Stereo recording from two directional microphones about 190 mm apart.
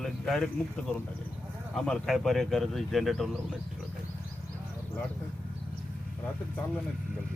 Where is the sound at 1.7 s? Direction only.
Centre (ahead or behind).